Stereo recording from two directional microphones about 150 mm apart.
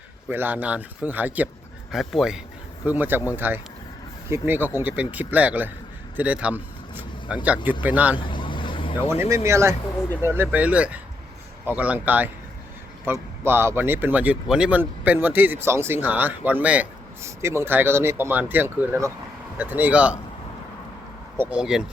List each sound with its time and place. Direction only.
0.3 s speech: 15° right (ahead or behind)
1.9 s speech: centre (ahead or behind)
2.8 s speech: 10° right (ahead or behind)
8.2 s vehicle: 35° left (ahead or behind)
9.0 s speech: 15° right (ahead or behind)
21.5 s speech: 5° right (ahead or behind)